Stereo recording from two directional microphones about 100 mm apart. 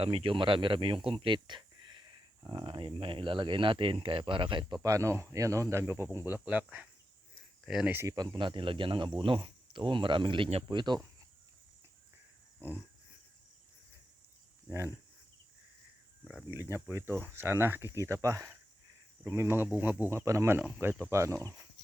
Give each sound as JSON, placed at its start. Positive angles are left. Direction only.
{"t": 0.0, "sound": "speech", "side_deg": -70}
{"t": 4.8, "sound": "speech", "side_deg": -30}
{"t": 6.4, "sound": "speech", "side_deg": -15}
{"t": 7.6, "sound": "speech", "side_deg": -5}
{"t": 8.0, "sound": "speech", "side_deg": -45}
{"t": 12.5, "sound": "a sound", "side_deg": -20}
{"t": 14.7, "sound": "speech", "side_deg": -30}
{"t": 16.5, "sound": "speech", "side_deg": -25}
{"t": 19.7, "sound": "speech", "side_deg": -15}